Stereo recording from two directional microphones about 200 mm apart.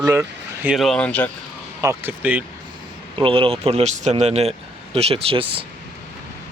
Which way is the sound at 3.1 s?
25° right (ahead or behind).